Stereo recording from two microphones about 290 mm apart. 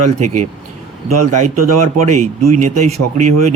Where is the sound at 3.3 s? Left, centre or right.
Right.